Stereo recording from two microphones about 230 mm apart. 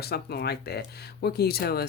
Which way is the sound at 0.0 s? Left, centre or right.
Left.